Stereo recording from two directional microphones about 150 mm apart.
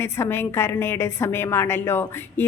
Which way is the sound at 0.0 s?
15° left (ahead or behind).